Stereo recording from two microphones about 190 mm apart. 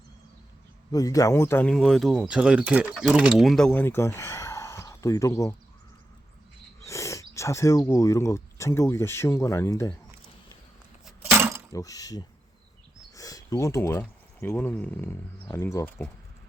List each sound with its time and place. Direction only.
0.9 s speech: 20° left (ahead or behind)
1.7 s speech: centre (ahead or behind)
6.8 s speech: 15° left (ahead or behind)
11.0 s a sound: 10° right (ahead or behind)
11.7 s speech: 20° left (ahead or behind)